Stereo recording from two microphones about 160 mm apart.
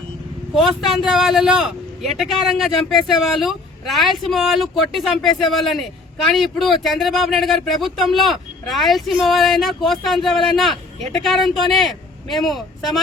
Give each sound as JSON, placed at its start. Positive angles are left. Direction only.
{"t": 0.5, "sound": "a man's voice", "side_deg": 0}